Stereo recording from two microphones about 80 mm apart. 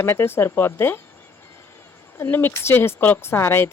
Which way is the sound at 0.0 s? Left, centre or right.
Left.